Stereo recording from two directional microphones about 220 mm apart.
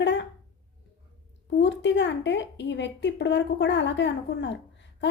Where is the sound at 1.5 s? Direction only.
55° left (ahead or behind).